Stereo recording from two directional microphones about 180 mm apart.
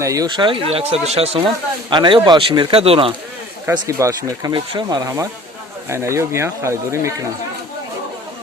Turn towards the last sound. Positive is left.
turn(degrees=-15)  # may be behind; listen again after turning